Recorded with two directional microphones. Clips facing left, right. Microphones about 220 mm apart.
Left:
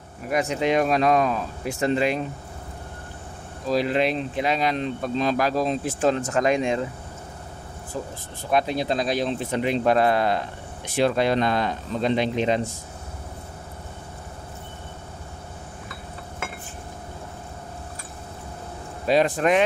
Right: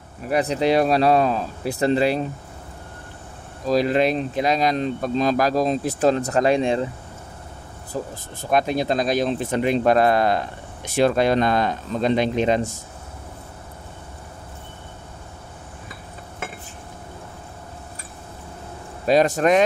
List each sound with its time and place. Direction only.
0.3 s speech: 35° right (ahead or behind)
3.6 s speech: 40° right (ahead or behind)
7.9 s speech: 40° right (ahead or behind)
19.0 s speech: 45° right (ahead or behind)